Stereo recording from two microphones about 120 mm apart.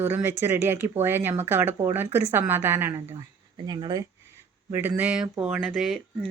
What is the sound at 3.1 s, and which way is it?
Speech, 35° right (ahead or behind).